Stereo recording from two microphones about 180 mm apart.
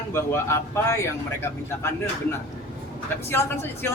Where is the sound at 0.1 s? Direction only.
15° left (ahead or behind).